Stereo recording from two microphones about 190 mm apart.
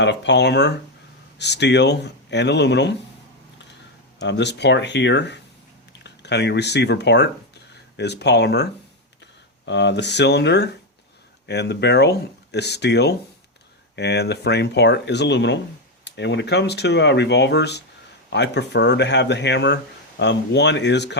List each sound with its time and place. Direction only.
0.0 s speech: 65° left (ahead or behind)
4.2 s speech: 65° left (ahead or behind)